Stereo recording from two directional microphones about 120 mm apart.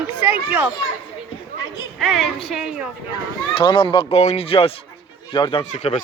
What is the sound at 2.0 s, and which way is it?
Speech, centre (ahead or behind).